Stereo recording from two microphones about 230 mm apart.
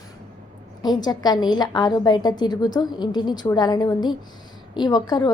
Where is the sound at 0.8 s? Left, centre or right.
Centre.